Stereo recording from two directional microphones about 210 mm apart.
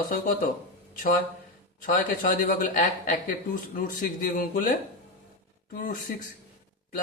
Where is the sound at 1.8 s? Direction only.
40° left (ahead or behind).